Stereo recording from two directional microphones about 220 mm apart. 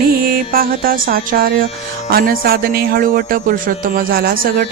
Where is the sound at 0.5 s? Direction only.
40° right (ahead or behind).